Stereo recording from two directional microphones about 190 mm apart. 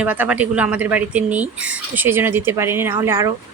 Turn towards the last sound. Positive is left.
turn(degrees=-15)  # may be behind; listen again after turning